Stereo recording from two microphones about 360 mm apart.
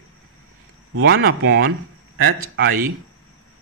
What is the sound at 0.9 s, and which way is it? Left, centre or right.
A man's voice, right.